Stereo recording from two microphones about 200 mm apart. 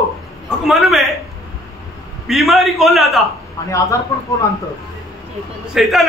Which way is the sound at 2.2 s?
Centre (ahead or behind).